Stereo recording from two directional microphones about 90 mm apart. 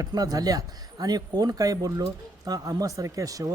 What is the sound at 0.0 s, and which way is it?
Speech, 45° right (ahead or behind).